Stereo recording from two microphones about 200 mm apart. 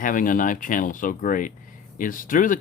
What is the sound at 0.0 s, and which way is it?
Speech, 45° left (ahead or behind).